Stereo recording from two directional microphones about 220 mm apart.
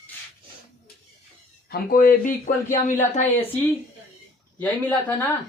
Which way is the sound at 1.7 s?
40° left (ahead or behind).